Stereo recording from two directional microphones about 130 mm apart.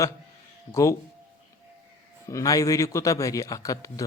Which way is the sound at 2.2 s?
25° left (ahead or behind).